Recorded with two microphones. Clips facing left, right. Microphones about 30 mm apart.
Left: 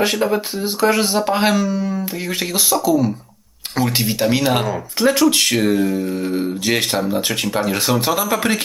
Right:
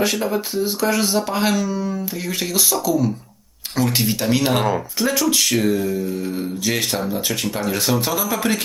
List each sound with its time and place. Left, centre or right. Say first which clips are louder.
0.0 s speech: left 3 dB; centre